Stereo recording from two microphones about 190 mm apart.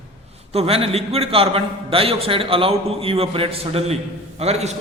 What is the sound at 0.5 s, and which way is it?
A man's voice, 30° right (ahead or behind).